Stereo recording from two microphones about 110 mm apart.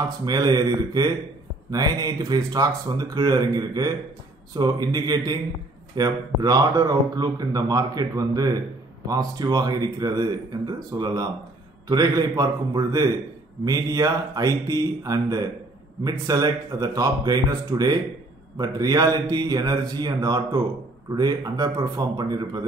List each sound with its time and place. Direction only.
0.2 s a man's voice: 40° right (ahead or behind)